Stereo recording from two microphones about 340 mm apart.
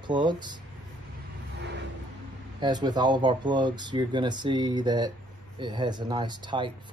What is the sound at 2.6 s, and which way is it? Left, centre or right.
Speech, centre.